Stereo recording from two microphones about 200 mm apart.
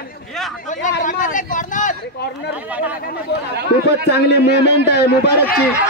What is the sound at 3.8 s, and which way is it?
A man's voice, 55° left (ahead or behind).